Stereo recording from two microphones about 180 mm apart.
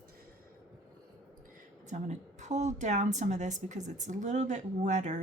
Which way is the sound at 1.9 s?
40° right (ahead or behind).